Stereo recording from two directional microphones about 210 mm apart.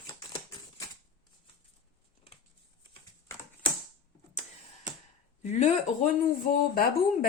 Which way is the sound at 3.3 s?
15° left (ahead or behind).